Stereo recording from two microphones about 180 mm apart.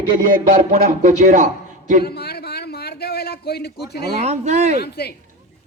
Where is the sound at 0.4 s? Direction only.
50° right (ahead or behind).